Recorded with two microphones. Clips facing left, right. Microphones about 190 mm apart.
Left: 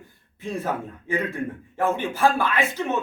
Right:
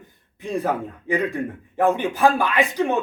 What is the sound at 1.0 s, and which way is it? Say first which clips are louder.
A man's voice: right 3 dB; 15° right (ahead or behind).